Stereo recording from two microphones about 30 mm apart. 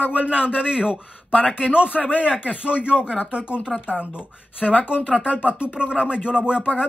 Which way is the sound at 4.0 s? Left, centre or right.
Right.